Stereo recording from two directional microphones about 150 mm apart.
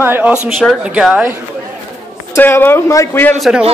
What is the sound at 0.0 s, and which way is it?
Speech, 10° right (ahead or behind).